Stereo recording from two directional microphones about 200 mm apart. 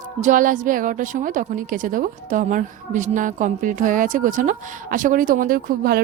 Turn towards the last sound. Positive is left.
turn(degrees=-45)  # may be behind; listen again after turning